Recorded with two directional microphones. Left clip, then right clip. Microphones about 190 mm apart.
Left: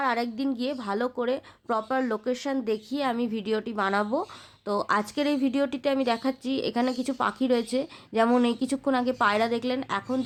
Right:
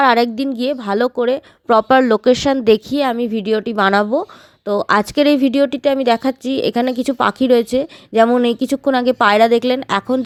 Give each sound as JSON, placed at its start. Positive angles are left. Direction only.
{"t": 0.0, "sound": "speech", "side_deg": -40}
{"t": 4.1, "sound": "speech", "side_deg": -25}